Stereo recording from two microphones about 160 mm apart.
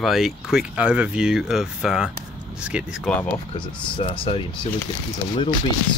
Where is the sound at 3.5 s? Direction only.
35° left (ahead or behind).